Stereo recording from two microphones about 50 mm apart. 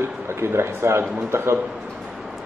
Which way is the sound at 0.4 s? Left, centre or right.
Right.